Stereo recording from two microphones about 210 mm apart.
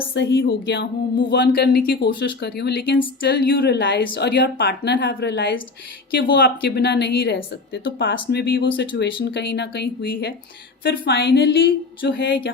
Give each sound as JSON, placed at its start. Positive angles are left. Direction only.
{"t": 0.1, "sound": "a woman's voice", "side_deg": 60}